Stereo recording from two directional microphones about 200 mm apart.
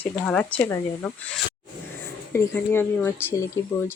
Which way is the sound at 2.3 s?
10° left (ahead or behind).